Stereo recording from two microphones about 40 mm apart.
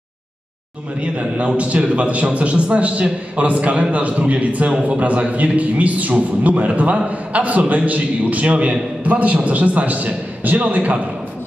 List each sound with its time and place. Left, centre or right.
1.0 s a man's voice: right